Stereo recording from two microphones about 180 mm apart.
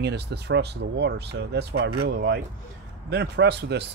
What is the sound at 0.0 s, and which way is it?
Speech, 70° right (ahead or behind).